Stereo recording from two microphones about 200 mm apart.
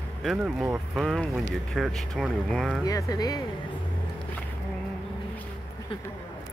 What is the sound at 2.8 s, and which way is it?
Speech, 15° left (ahead or behind).